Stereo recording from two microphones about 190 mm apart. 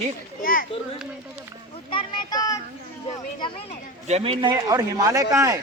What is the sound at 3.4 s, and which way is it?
Speech, 25° left (ahead or behind).